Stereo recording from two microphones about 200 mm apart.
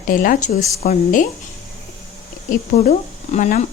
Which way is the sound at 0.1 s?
40° left (ahead or behind).